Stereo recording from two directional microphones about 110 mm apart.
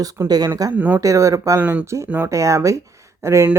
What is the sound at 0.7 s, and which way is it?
Speech, 15° right (ahead or behind).